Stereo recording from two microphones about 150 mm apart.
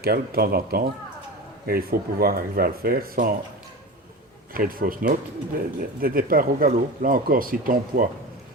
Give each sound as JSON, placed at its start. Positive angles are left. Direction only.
{"t": 0.0, "sound": "speech", "side_deg": -90}
{"t": 4.5, "sound": "speech", "side_deg": -70}